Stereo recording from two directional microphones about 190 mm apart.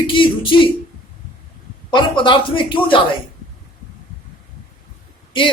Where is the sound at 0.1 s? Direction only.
25° left (ahead or behind).